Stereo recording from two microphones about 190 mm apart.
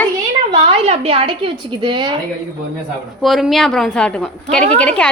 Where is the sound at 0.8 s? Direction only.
30° right (ahead or behind).